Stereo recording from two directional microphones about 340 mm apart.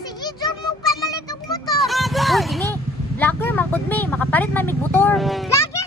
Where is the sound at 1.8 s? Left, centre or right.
Centre.